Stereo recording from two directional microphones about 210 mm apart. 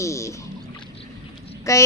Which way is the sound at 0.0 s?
15° left (ahead or behind).